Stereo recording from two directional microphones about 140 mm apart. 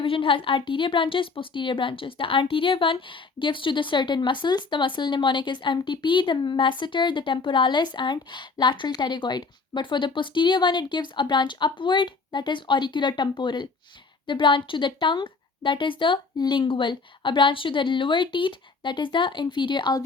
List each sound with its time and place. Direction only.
0.0 s a woman's voice: 40° left (ahead or behind)